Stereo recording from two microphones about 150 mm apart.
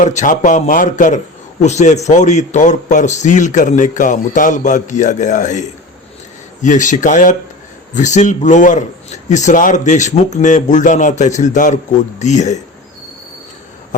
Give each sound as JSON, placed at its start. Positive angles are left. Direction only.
{"t": 0.0, "sound": "a man's voice", "side_deg": 55}